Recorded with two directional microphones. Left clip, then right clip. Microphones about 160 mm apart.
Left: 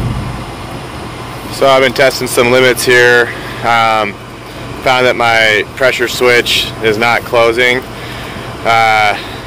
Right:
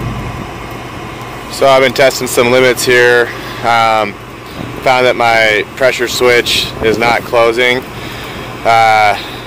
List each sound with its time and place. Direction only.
1.6 s speech: 15° right (ahead or behind)